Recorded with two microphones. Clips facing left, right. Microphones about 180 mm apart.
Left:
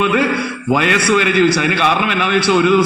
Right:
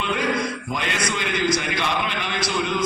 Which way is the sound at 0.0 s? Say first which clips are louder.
Left 8 dB; 65° left (ahead or behind).